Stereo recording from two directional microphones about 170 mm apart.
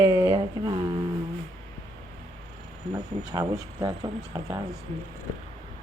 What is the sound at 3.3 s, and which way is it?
A woman's voice, 20° right (ahead or behind).